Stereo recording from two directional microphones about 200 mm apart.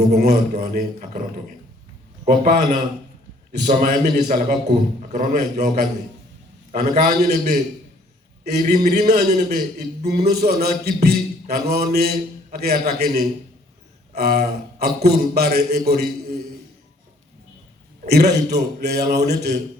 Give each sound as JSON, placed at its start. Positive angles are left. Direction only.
{"t": 0.0, "sound": "a man's voice", "side_deg": -50}
{"t": 8.6, "sound": "a man's voice", "side_deg": -40}
{"t": 14.1, "sound": "a sound", "side_deg": -50}
{"t": 15.0, "sound": "a man's voice", "side_deg": -50}
{"t": 15.9, "sound": "a sound", "side_deg": -50}
{"t": 18.1, "sound": "a man's voice", "side_deg": -55}